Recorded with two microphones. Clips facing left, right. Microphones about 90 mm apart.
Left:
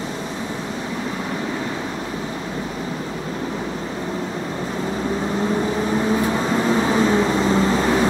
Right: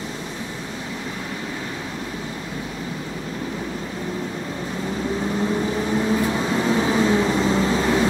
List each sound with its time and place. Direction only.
5.9 s vehicle: 15° left (ahead or behind)